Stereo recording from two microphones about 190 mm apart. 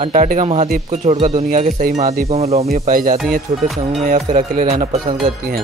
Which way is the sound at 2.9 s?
45° right (ahead or behind).